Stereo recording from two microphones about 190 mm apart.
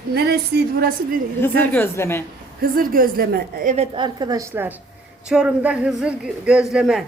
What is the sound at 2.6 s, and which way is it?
A woman's voice, 50° right (ahead or behind).